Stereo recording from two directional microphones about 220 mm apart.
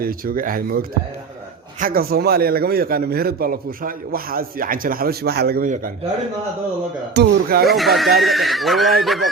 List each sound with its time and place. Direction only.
0.0 s a man's voice: 40° right (ahead or behind)
7.1 s a man's voice: 45° right (ahead or behind)
7.7 s speech: centre (ahead or behind)